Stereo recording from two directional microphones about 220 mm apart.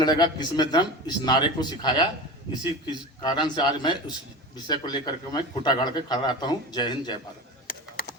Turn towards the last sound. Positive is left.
turn(degrees=40)  # may be behind; listen again after turning